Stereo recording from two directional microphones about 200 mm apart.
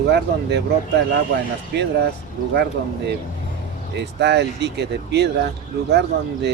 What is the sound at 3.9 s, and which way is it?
Speech, 60° right (ahead or behind).